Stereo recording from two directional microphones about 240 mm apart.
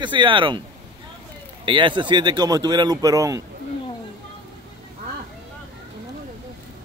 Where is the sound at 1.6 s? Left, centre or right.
Centre.